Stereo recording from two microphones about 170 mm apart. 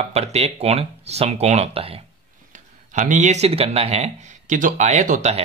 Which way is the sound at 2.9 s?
45° right (ahead or behind).